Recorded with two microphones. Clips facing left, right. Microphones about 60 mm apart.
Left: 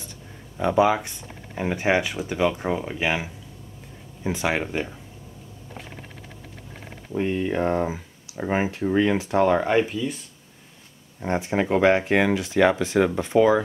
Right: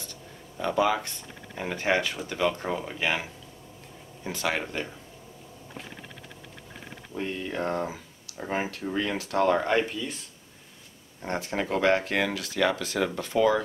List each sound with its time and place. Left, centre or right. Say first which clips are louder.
0.6 s speech: left 5 dB; centre
7.1 s speech: left 8 dB; left; by 10.1 s centre
11.1 s speech: left 6 dB; centre